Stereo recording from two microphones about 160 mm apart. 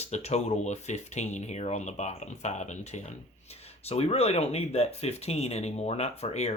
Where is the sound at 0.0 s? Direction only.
45° left (ahead or behind).